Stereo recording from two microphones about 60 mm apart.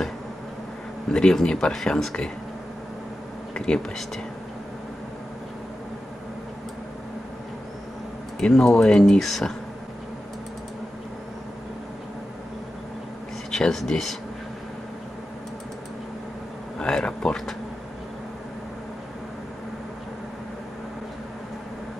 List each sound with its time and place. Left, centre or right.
1.1 s speech: centre
3.5 s speech: centre
8.4 s speech: centre
13.5 s speech: centre
16.7 s speech: centre